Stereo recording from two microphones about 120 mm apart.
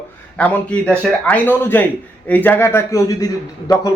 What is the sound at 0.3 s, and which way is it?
A man's voice, 10° left (ahead or behind).